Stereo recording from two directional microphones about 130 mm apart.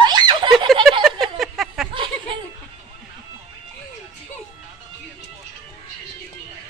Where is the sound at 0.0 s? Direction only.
35° right (ahead or behind).